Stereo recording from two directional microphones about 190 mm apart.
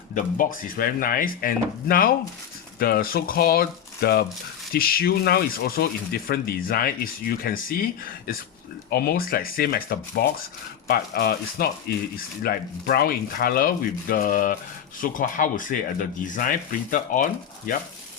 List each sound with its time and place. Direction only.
0.1 s speech: 45° left (ahead or behind)
8.9 s speech: 55° left (ahead or behind)